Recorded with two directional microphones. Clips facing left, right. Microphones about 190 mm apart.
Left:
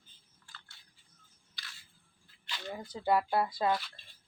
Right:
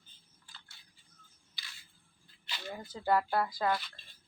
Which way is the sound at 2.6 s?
15° left (ahead or behind).